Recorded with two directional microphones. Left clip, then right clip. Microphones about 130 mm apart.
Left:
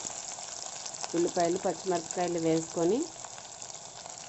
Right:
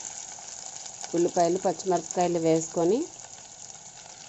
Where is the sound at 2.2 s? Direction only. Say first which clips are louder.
Right 6 dB; 25° right (ahead or behind).